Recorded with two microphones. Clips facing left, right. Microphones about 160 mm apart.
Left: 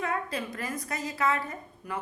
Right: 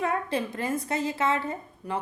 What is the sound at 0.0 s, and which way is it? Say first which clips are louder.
A woman's voice: right 4 dB; 30° right (ahead or behind).